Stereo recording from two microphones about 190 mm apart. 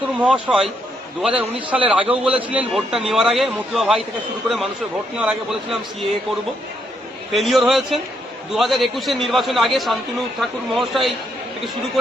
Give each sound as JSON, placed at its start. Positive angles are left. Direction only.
{"t": 0.2, "sound": "a man's voice", "side_deg": -5}
{"t": 7.3, "sound": "a man's voice", "side_deg": 0}